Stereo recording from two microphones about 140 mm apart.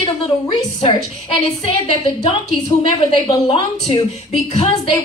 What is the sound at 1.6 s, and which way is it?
A woman's voice, 45° left (ahead or behind).